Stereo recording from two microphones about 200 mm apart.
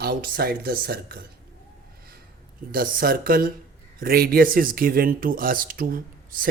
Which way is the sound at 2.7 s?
45° right (ahead or behind).